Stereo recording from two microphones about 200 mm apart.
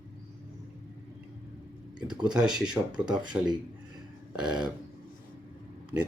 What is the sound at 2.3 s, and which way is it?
Speech, 5° right (ahead or behind).